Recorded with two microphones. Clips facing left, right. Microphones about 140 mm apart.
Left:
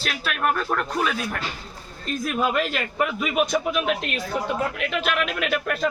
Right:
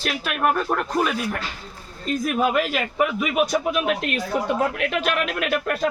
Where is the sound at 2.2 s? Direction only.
10° right (ahead or behind).